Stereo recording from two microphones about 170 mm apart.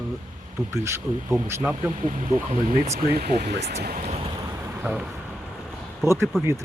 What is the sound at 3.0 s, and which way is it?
Speech, 65° right (ahead or behind).